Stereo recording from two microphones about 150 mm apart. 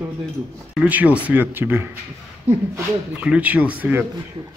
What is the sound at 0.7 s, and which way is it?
Speech, 10° right (ahead or behind).